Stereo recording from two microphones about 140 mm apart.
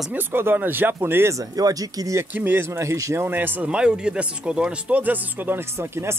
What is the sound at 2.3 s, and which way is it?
Speech, 15° right (ahead or behind).